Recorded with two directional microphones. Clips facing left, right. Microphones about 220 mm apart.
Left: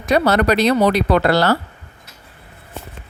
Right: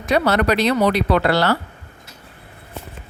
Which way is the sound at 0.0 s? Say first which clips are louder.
Left 2 dB; 40° left (ahead or behind).